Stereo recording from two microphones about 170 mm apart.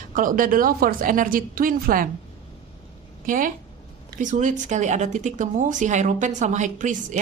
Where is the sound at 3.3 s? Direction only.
50° right (ahead or behind).